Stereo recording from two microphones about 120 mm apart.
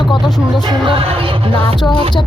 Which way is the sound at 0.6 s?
40° right (ahead or behind).